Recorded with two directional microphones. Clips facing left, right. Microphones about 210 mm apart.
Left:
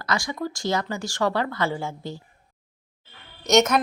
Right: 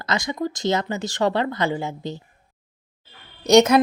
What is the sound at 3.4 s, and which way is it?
Speech, 30° right (ahead or behind).